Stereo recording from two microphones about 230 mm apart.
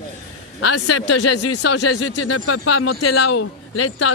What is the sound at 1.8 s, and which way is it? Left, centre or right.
Speech, left.